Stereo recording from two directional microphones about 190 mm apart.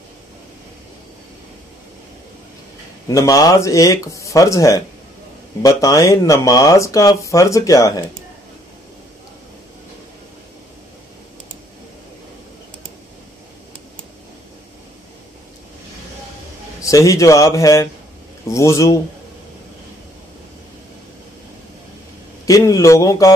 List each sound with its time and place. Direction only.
3.1 s speech: 20° left (ahead or behind)
16.8 s speech: 15° left (ahead or behind)
22.5 s speech: 15° left (ahead or behind)